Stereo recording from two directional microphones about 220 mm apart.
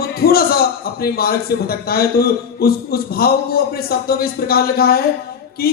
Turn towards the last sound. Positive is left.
turn(degrees=45)  # may be behind; listen again after turning